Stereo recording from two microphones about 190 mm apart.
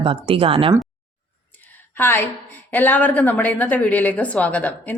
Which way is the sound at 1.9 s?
10° left (ahead or behind).